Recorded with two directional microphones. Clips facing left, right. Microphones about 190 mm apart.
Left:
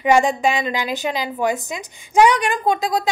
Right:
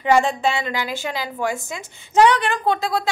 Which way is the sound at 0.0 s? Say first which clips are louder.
Left 2 dB; 15° left (ahead or behind).